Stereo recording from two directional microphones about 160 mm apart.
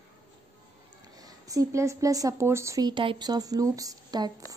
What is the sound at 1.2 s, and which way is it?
A woman's voice, 20° right (ahead or behind).